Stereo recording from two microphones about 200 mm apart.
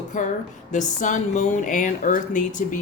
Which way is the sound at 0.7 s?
40° left (ahead or behind).